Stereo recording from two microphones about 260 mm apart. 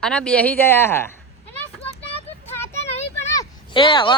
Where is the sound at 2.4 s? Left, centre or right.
Centre.